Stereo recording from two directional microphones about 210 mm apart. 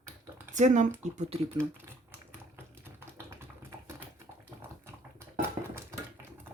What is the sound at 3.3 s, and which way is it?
Typing, 10° right (ahead or behind).